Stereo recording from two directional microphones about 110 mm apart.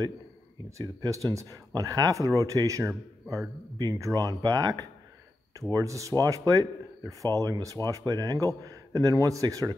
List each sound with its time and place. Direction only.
0.7 s speech: 30° right (ahead or behind)